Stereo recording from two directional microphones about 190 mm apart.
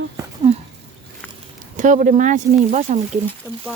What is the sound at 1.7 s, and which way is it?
Speech, 45° right (ahead or behind).